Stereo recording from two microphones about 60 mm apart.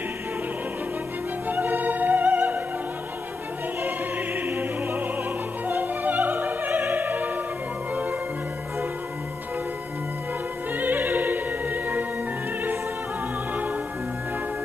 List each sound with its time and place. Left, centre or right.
1.5 s opera: right
4.5 s music: right
10.8 s opera: right